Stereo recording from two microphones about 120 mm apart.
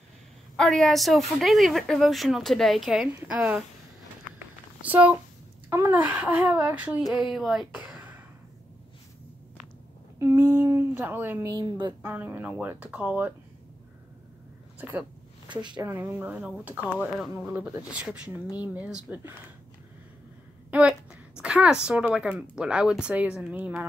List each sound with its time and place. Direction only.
0.6 s speech: 5° left (ahead or behind)
4.8 s speech: 15° right (ahead or behind)
10.1 s a woman's voice: 20° right (ahead or behind)
14.8 s speech: 15° right (ahead or behind)
15.4 s speech: 40° right (ahead or behind)
15.8 s speech: 20° right (ahead or behind); by 17.5 s 5° right (ahead or behind)
17.5 s speech: 15° right (ahead or behind)
20.7 s a woman's voice: 10° right (ahead or behind)